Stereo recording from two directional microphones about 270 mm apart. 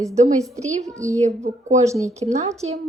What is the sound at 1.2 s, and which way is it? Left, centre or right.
Speech, right.